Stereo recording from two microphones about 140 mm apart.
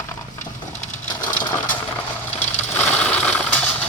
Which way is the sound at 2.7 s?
10° left (ahead or behind).